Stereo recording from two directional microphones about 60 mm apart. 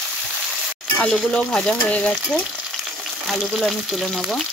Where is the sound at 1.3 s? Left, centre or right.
Centre.